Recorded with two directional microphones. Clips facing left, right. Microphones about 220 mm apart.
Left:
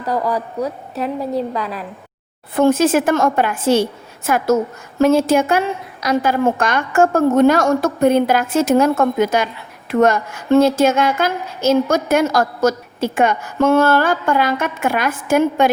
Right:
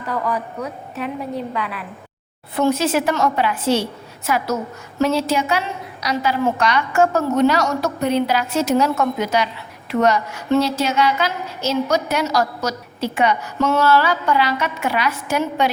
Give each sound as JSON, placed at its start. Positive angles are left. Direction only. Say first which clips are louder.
{"t": 0.0, "sound": "a woman's voice", "louder": "left 4 dB", "side_deg": 35}
{"t": 2.6, "sound": "a woman's voice", "louder": "left 5 dB", "side_deg": 50}